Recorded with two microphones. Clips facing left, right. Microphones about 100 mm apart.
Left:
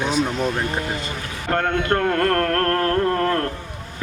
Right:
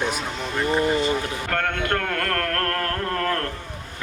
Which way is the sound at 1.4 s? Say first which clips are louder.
Left 7 dB; 20° left (ahead or behind).